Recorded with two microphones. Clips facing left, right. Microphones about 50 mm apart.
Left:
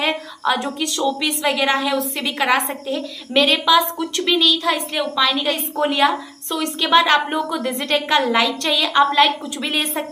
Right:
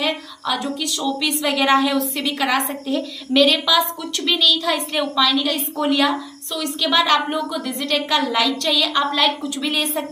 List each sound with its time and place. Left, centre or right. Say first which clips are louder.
0.0 s a woman's voice: left 3 dB; left
1.4 s a woman's voice: right 2 dB; centre
2.3 s a woman's voice: left 3 dB; left